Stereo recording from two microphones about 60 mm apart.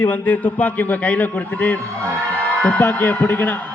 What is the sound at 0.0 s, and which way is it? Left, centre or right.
A man's voice, left.